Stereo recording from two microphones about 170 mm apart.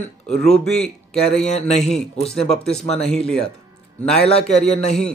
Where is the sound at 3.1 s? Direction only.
5° left (ahead or behind).